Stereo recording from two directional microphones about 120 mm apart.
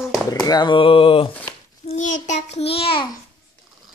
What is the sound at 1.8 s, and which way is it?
Child singing, 85° left.